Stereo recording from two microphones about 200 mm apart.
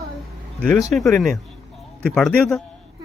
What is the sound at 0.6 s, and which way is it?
Speech, 5° left (ahead or behind).